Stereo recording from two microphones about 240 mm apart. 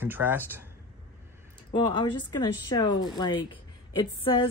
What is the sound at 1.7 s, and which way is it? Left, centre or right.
Speech, centre.